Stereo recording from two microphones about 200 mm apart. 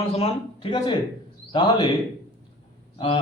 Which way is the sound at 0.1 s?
30° left (ahead or behind).